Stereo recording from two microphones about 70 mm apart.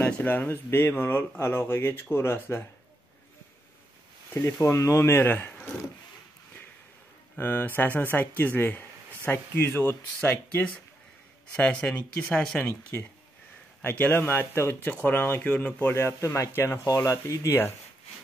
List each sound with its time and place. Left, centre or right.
0.0 s speech: left
4.3 s speech: left
5.1 s speech: left
5.5 s wood: centre
7.3 s speech: left
15.9 s speech: left